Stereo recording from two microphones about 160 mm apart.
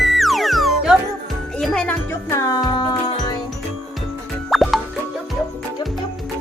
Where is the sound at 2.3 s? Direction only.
20° left (ahead or behind).